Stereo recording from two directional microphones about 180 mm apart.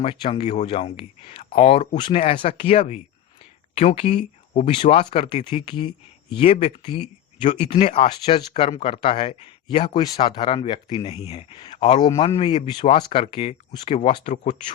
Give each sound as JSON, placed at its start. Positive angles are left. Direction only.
{"t": 0.0, "sound": "speech", "side_deg": 30}